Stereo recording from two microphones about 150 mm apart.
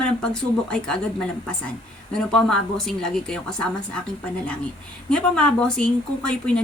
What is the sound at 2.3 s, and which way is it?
A woman's voice, 5° left (ahead or behind).